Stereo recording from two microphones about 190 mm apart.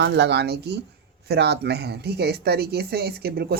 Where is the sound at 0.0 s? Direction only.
65° right (ahead or behind).